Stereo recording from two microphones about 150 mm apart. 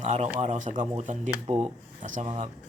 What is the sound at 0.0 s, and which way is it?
Speech, 50° right (ahead or behind).